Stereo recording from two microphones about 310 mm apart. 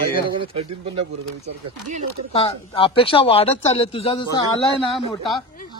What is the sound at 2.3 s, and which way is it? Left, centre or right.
Speech, centre.